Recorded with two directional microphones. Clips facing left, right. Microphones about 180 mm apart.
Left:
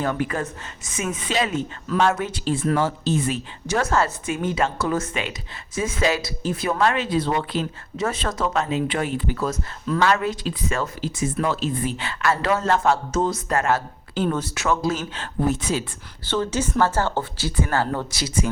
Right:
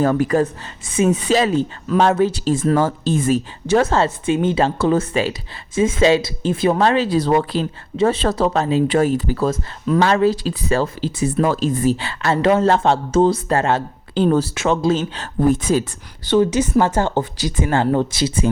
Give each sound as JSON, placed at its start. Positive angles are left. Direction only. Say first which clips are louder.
{"t": 0.0, "sound": "speech", "louder": "right 8 dB", "side_deg": -40}
{"t": 3.7, "sound": "speech", "louder": "right 6 dB", "side_deg": -25}
{"t": 9.8, "sound": "speech", "louder": "right 5 dB", "side_deg": -20}
{"t": 10.1, "sound": "speech", "louder": "right 6 dB", "side_deg": -30}
{"t": 11.4, "sound": "speech", "louder": "right 9 dB", "side_deg": -45}
{"t": 15.2, "sound": "speech", "louder": "right 6 dB", "side_deg": -50}
{"t": 16.2, "sound": "speech", "louder": "right 8 dB", "side_deg": -15}